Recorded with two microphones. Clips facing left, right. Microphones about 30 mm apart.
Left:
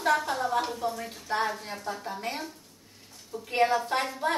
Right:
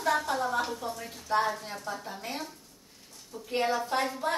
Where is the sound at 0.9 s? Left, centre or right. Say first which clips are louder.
Right 1 dB; left.